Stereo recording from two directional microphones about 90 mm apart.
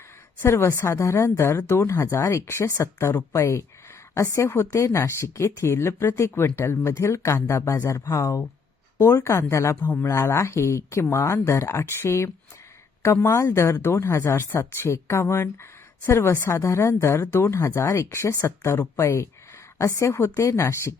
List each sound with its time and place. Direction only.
0.4 s speech: 30° left (ahead or behind)